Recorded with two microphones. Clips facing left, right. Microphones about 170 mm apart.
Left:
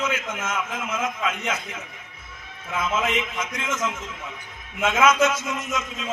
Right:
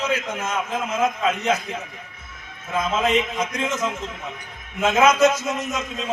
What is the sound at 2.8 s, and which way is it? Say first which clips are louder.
A man's voice: right 4 dB; 35° right (ahead or behind).